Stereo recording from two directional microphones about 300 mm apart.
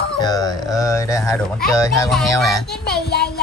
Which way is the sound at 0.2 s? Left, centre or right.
Centre.